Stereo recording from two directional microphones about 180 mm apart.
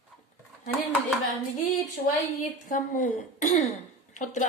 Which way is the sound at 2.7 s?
45° left (ahead or behind).